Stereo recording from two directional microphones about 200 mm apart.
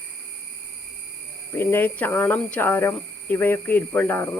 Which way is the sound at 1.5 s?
10° left (ahead or behind).